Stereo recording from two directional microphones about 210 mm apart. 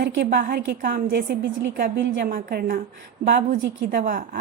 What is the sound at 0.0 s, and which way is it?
A woman's voice, 55° right (ahead or behind).